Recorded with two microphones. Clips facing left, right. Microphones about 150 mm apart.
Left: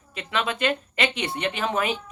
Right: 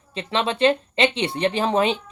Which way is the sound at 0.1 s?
30° right (ahead or behind).